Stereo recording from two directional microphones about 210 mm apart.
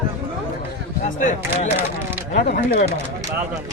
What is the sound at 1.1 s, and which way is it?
Speech, 35° left (ahead or behind).